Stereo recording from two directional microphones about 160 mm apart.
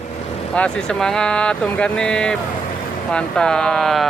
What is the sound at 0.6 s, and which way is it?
Speech, 5° left (ahead or behind).